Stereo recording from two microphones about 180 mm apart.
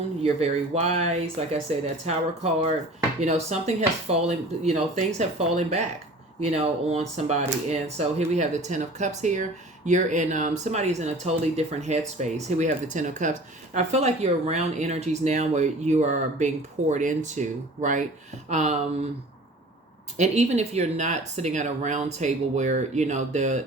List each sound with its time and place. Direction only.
0.2 s speech: 35° right (ahead or behind)
20.1 s speech: 40° right (ahead or behind)